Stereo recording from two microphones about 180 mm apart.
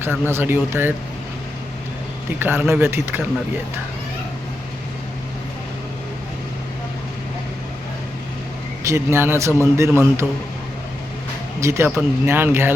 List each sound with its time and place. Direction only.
0.0 s speech: 15° right (ahead or behind)
2.4 s speech: 10° right (ahead or behind)
8.8 s speech: 15° right (ahead or behind)
11.6 s speech: 15° right (ahead or behind)